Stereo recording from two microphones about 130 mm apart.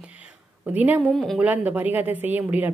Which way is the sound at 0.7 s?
10° right (ahead or behind).